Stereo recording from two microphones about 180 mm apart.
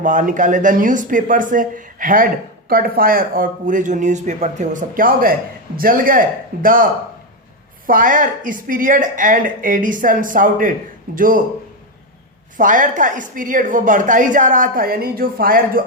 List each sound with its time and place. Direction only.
0.0 s speech: 45° right (ahead or behind)
7.9 s speech: 50° right (ahead or behind)
12.5 s speech: 45° right (ahead or behind)